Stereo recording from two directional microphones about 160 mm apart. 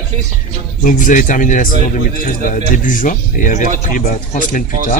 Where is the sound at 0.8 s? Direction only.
55° left (ahead or behind).